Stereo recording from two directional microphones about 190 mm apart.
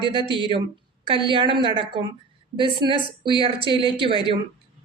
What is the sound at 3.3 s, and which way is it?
Speech, 25° right (ahead or behind).